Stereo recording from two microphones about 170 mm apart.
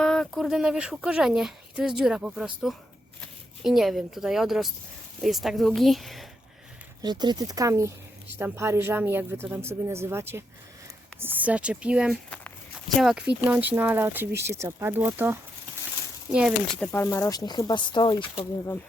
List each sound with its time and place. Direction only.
0.0 s speech: 5° left (ahead or behind)
7.0 s a woman's voice: 25° right (ahead or behind)
16.8 s speech: 15° left (ahead or behind)